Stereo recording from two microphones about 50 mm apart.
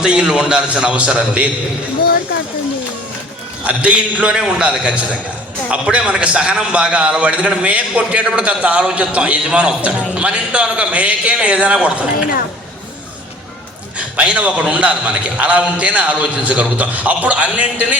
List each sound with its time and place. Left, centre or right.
0.0 s a man's voice: centre
3.6 s a man's voice: right
14.2 s a man's voice: right